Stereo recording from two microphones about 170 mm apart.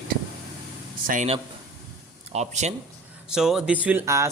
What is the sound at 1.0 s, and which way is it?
Speech, 50° right (ahead or behind).